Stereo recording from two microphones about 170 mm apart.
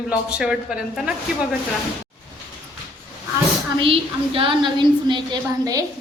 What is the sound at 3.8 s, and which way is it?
A woman's voice, 30° right (ahead or behind).